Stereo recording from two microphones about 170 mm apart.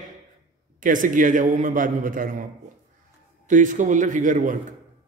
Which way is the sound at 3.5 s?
50° right (ahead or behind).